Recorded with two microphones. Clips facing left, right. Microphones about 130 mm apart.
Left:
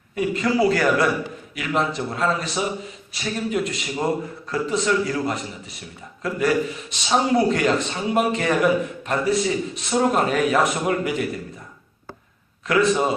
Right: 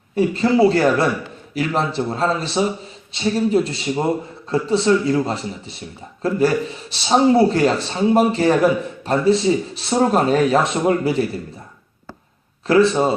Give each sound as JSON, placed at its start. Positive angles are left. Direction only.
{"t": 0.2, "sound": "a man's voice", "side_deg": -30}
{"t": 12.6, "sound": "a man's voice", "side_deg": -30}